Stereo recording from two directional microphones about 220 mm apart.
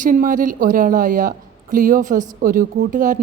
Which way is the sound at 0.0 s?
40° right (ahead or behind).